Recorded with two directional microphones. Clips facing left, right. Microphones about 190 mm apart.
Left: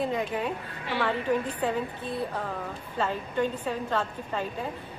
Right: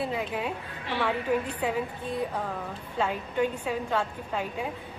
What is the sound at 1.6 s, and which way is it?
A woman's voice, 10° right (ahead or behind).